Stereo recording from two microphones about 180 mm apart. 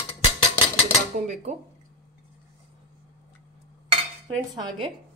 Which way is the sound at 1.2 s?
40° right (ahead or behind).